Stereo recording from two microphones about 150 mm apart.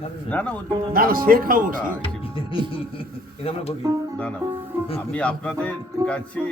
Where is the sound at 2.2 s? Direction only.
35° left (ahead or behind).